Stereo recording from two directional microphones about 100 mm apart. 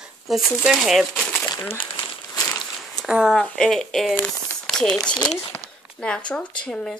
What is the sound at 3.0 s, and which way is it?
Speech, 5° right (ahead or behind).